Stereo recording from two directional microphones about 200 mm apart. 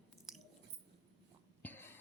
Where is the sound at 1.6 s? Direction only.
10° left (ahead or behind).